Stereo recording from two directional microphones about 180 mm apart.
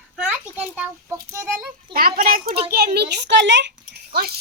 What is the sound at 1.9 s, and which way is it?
A child's voice, 55° right (ahead or behind).